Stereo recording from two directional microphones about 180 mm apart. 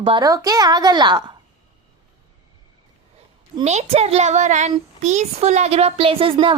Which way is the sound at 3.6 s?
40° right (ahead or behind).